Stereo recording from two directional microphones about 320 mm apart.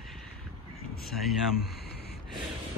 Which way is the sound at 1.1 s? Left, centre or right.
Centre.